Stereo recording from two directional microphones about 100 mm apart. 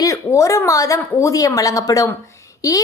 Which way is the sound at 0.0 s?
30° left (ahead or behind).